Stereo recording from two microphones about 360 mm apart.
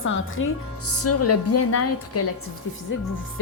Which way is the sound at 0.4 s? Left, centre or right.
Left.